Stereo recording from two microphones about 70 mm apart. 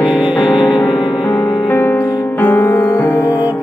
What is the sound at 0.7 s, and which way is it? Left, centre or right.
Music, left.